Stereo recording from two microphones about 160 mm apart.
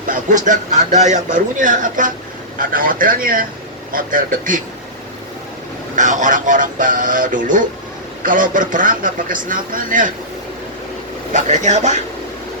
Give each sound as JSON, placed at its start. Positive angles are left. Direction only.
{"t": 0.1, "sound": "a man's voice", "side_deg": -50}
{"t": 6.0, "sound": "speech", "side_deg": -50}
{"t": 11.3, "sound": "a man's voice", "side_deg": -50}